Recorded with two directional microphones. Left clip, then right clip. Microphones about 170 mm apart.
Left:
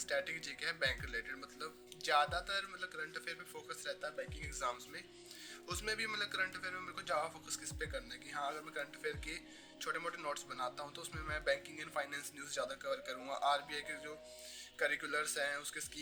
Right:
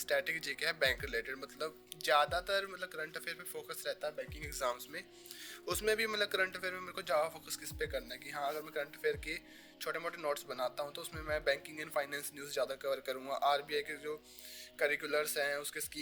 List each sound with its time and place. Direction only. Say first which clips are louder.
0.1 s speech: right 5 dB; 45° right (ahead or behind)